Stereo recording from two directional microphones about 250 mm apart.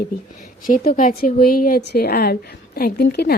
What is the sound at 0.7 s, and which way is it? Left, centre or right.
A woman's voice, left.